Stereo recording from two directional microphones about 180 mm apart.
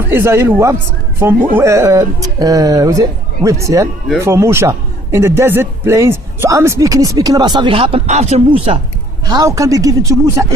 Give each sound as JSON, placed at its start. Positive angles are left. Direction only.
{"t": 0.1, "sound": "speech", "side_deg": -15}
{"t": 9.2, "sound": "speech", "side_deg": -20}